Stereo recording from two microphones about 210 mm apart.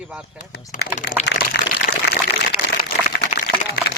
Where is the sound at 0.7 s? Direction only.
50° left (ahead or behind).